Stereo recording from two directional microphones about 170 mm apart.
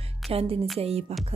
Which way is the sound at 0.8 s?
35° right (ahead or behind).